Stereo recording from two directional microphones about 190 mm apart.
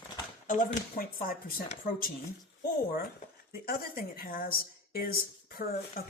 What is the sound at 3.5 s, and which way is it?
Speech, 50° left (ahead or behind).